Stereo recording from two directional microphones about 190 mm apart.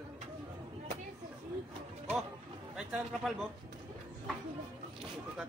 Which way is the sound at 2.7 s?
Centre (ahead or behind).